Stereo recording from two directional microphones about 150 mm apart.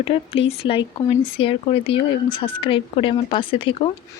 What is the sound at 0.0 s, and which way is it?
Speech, 40° left (ahead or behind).